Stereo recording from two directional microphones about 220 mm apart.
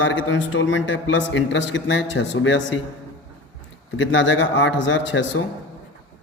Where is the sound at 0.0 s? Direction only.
60° left (ahead or behind).